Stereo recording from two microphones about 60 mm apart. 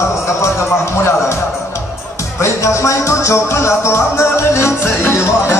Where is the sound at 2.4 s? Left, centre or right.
Left.